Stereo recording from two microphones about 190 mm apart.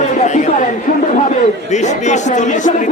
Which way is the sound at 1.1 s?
40° left (ahead or behind).